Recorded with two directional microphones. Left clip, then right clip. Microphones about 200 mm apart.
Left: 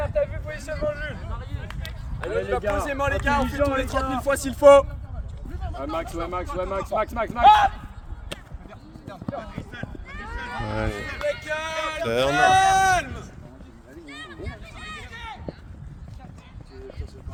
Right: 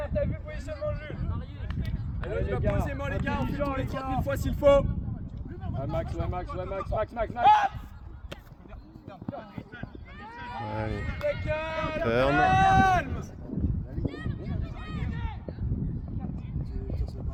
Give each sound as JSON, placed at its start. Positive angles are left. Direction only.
{"t": 0.0, "sound": "vehicle", "side_deg": 10}
{"t": 0.9, "sound": "a sound", "side_deg": 10}
{"t": 1.6, "sound": "a sound", "side_deg": 20}
{"t": 2.3, "sound": "speech", "side_deg": 40}
{"t": 5.7, "sound": "speech", "side_deg": 50}
{"t": 7.4, "sound": "speech", "side_deg": -10}
{"t": 9.2, "sound": "run", "side_deg": 30}
{"t": 10.9, "sound": "speech", "side_deg": 30}
{"t": 11.4, "sound": "a sound", "side_deg": 55}
{"t": 12.0, "sound": "speech", "side_deg": 15}
{"t": 12.3, "sound": "speech", "side_deg": 55}
{"t": 14.1, "sound": "run", "side_deg": 30}